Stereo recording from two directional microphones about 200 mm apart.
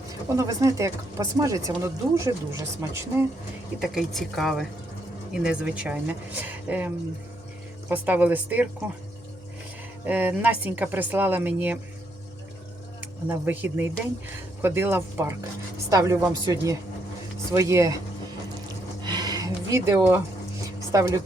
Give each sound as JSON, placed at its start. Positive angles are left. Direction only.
{"t": 0.3, "sound": "speech", "side_deg": -15}
{"t": 3.8, "sound": "a woman's voice", "side_deg": 0}
{"t": 10.1, "sound": "speech", "side_deg": -5}
{"t": 13.0, "sound": "speech", "side_deg": -10}
{"t": 19.0, "sound": "a sound", "side_deg": -20}
{"t": 20.9, "sound": "speech", "side_deg": -15}